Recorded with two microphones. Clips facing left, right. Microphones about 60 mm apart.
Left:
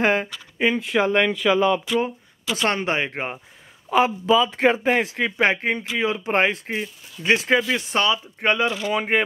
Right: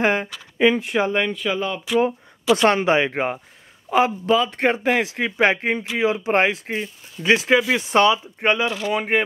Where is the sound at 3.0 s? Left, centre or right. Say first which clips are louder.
Right 6 dB; right.